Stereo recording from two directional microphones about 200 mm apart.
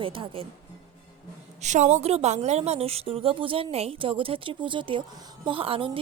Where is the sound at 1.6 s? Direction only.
35° right (ahead or behind).